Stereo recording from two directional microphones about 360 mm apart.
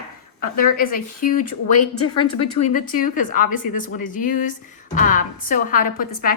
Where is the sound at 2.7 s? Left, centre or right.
Left.